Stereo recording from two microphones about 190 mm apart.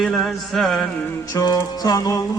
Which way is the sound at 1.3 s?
20° left (ahead or behind).